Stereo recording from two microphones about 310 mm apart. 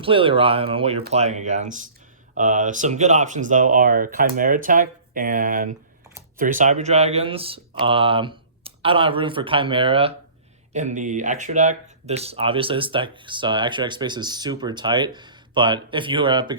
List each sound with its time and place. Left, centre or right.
0.0 s speech: centre